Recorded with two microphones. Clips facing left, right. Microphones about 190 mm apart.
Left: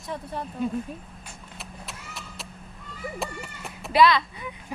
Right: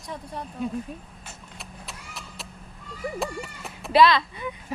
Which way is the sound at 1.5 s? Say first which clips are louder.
Left 2 dB; centre (ahead or behind).